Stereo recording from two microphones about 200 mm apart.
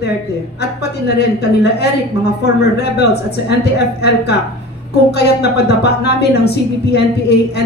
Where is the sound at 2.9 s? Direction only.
55° left (ahead or behind).